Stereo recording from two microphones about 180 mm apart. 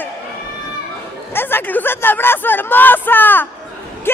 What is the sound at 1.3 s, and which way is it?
Speech, 10° left (ahead or behind).